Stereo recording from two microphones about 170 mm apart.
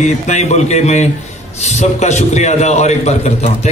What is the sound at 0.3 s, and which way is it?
A man's voice, 40° left (ahead or behind).